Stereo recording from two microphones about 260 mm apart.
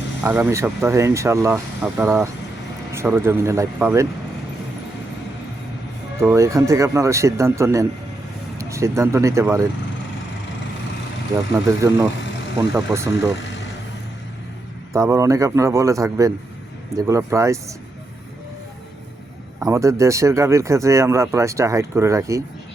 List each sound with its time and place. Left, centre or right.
0.2 s speech: centre
6.1 s speech: centre
11.5 s speech: centre
13.4 s a sound: left
14.9 s speech: centre
19.5 s speech: centre